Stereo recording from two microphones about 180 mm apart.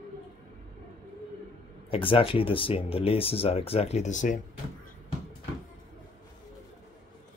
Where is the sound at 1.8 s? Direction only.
30° left (ahead or behind).